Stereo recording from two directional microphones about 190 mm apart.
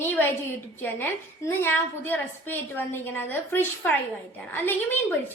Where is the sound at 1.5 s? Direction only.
10° left (ahead or behind).